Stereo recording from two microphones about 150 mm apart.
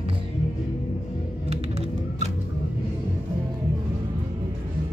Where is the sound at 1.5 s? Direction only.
45° right (ahead or behind).